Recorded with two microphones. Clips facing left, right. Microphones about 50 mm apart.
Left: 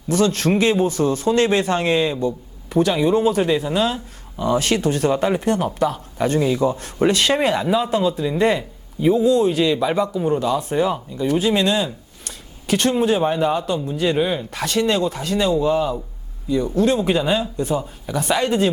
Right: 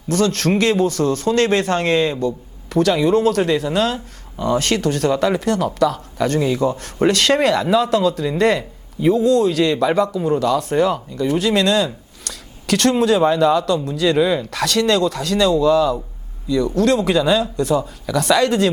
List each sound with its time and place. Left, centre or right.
0.1 s speech: right
16.5 s speech: right